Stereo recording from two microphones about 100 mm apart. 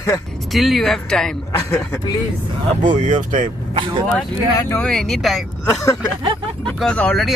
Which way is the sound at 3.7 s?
65° right (ahead or behind).